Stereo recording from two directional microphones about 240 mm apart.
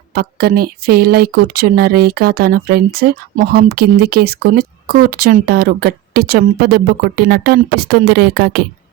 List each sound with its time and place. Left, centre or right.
0.1 s speech: right